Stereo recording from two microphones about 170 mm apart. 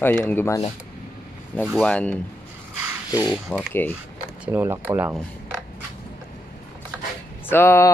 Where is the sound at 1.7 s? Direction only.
5° left (ahead or behind).